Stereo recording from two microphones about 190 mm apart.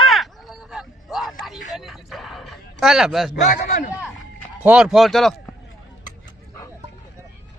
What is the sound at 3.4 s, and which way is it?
Speech, 40° left (ahead or behind).